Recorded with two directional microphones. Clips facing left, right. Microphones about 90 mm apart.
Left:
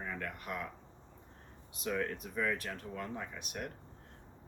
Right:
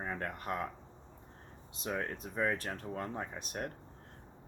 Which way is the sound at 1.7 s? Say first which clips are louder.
Left 1 dB; 30° right (ahead or behind).